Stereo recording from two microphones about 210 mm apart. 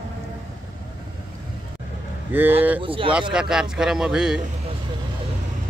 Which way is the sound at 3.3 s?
5° right (ahead or behind).